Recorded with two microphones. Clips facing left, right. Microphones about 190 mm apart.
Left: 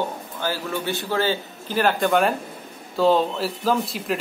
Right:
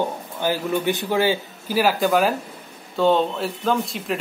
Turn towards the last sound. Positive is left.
turn(degrees=5)  # may be behind; listen again after turning